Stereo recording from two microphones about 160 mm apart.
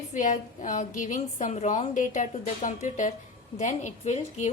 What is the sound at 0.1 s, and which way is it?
A woman's voice, 50° left (ahead or behind).